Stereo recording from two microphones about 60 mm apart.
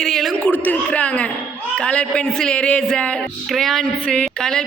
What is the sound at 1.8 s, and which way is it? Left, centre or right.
A woman's voice, centre.